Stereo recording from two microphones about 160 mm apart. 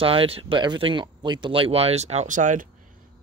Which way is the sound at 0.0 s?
35° right (ahead or behind).